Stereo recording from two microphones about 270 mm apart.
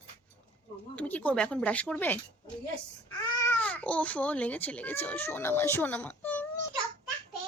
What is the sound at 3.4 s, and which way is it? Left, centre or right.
Speech, centre.